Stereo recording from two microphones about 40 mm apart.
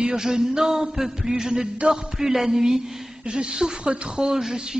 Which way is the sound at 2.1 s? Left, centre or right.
Centre.